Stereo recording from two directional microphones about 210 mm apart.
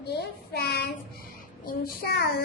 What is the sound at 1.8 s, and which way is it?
Speech, 50° left (ahead or behind).